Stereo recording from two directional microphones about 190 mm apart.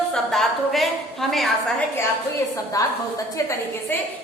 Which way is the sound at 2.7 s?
20° left (ahead or behind).